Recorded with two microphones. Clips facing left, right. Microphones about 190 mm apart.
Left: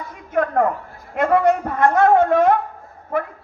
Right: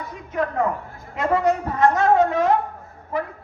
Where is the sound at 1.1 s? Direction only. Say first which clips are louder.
Left 4 dB; 55° left (ahead or behind).